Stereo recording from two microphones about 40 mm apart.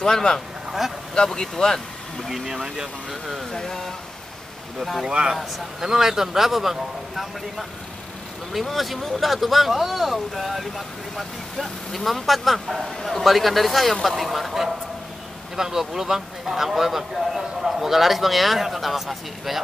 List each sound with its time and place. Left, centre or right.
0.0 s speech: centre
0.7 s speech: centre
1.1 s speech: centre
2.2 s speech: centre
3.5 s speech: centre
5.8 s speech: centre